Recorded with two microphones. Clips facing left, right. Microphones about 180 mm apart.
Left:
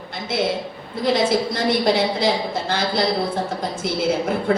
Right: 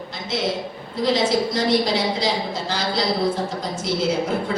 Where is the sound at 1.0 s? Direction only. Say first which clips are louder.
Left 1 dB; 55° left (ahead or behind).